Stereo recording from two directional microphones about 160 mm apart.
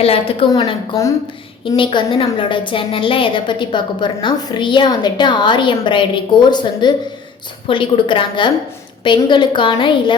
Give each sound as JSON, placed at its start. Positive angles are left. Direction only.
{"t": 0.0, "sound": "a woman's voice", "side_deg": 35}